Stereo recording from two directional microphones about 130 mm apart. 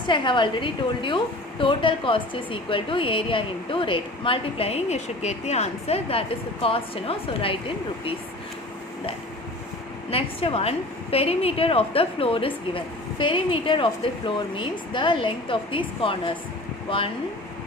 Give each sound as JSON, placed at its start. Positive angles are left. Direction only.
{"t": 0.1, "sound": "a woman's voice", "side_deg": 40}
{"t": 10.1, "sound": "a woman's voice", "side_deg": 45}